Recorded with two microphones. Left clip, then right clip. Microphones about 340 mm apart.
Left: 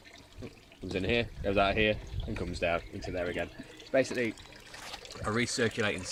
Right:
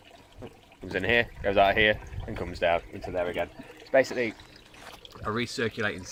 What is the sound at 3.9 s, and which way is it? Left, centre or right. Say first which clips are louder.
Speech: right 6 dB; centre.